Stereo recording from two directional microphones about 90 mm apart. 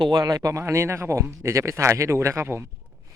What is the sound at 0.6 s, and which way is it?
Speech, 30° right (ahead or behind).